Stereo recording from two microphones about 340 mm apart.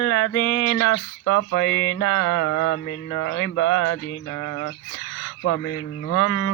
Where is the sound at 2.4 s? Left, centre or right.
Left.